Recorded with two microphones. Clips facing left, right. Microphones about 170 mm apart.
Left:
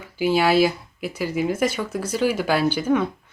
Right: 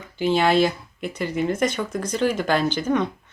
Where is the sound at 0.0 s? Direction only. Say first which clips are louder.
Even; 10° left (ahead or behind).